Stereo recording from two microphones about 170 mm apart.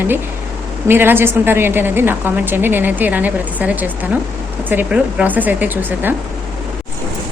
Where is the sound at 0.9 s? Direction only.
15° right (ahead or behind).